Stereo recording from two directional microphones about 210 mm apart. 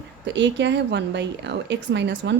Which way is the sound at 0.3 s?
55° right (ahead or behind).